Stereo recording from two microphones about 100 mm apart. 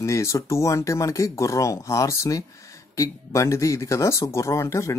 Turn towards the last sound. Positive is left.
turn(degrees=30)  # may be behind; listen again after turning